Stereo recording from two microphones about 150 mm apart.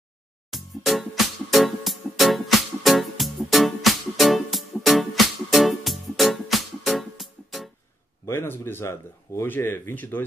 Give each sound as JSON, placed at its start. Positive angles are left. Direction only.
{"t": 0.5, "sound": "music", "side_deg": 0}
{"t": 8.3, "sound": "speech", "side_deg": 15}